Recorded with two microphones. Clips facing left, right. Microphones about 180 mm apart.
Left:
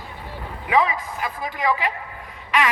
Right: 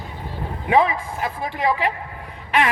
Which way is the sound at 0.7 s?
30° right (ahead or behind).